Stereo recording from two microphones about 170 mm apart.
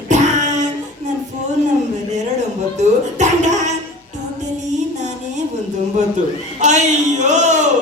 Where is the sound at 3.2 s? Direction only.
45° right (ahead or behind).